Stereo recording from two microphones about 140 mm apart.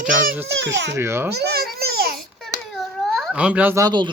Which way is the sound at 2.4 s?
Centre (ahead or behind).